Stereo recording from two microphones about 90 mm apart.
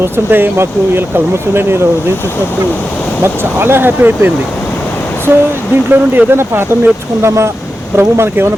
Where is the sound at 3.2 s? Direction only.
25° right (ahead or behind).